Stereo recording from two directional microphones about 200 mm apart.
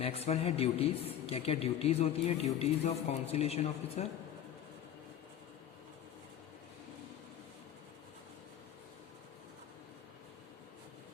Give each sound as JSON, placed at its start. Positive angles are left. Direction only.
{"t": 0.0, "sound": "a man's voice", "side_deg": 30}